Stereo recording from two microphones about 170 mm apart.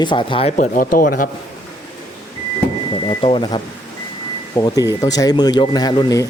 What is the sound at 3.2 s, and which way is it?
Speech, 35° left (ahead or behind).